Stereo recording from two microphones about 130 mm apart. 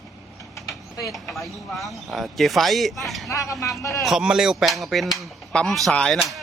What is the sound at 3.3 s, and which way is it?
Speech, 25° left (ahead or behind).